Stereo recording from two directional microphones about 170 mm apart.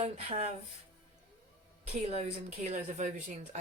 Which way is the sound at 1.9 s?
40° right (ahead or behind).